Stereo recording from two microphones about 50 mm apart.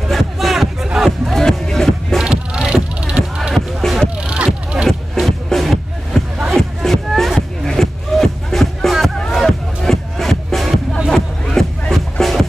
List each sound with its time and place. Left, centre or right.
0.1 s music: centre
1.3 s music: centre
2.2 s music: centre
3.5 s music: centre
4.2 s music: right
4.8 s music: centre